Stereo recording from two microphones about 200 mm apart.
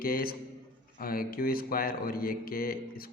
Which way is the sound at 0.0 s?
45° left (ahead or behind).